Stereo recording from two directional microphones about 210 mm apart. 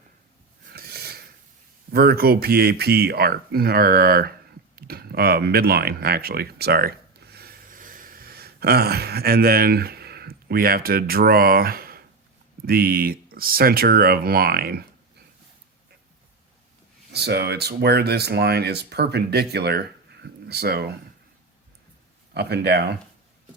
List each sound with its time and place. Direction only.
0.7 s mechanisms: 50° right (ahead or behind)
1.9 s speech: 45° right (ahead or behind)
17.1 s speech: 50° right (ahead or behind)
22.4 s speech: 50° right (ahead or behind)